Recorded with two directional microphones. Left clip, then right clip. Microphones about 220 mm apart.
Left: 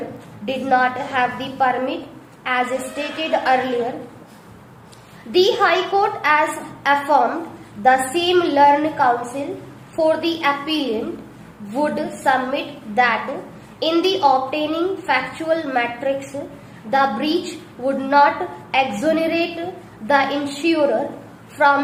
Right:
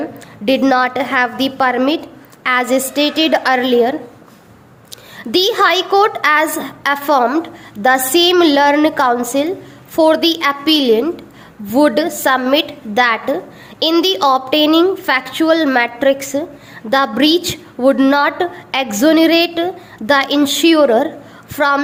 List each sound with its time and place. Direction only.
0.4 s a woman's voice: 50° right (ahead or behind)
5.3 s a woman's voice: 45° right (ahead or behind)